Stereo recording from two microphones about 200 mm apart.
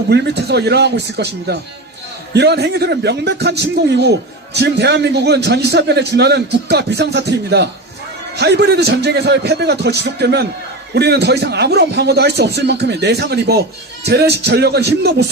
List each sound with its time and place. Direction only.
0.1 s a man's voice: 55° right (ahead or behind)